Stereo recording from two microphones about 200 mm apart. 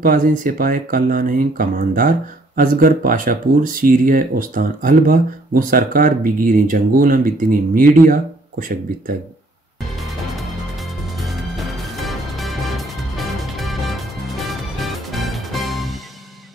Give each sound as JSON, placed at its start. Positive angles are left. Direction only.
{"t": 0.0, "sound": "speech", "side_deg": -45}
{"t": 10.0, "sound": "music", "side_deg": 0}